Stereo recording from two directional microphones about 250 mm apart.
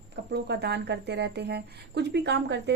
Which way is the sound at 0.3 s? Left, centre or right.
Right.